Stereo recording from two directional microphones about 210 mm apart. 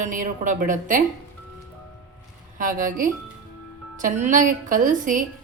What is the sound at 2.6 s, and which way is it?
A woman's voice, 40° right (ahead or behind).